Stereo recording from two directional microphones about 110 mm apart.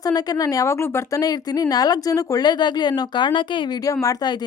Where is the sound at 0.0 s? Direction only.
35° left (ahead or behind).